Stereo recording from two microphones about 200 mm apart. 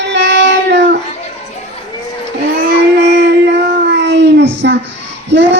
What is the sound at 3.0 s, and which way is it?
Child singing, 60° right (ahead or behind).